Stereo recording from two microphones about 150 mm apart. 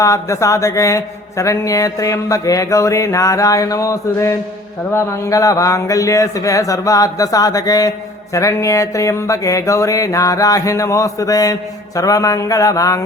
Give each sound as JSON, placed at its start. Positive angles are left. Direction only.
{"t": 0.0, "sound": "speech", "side_deg": 20}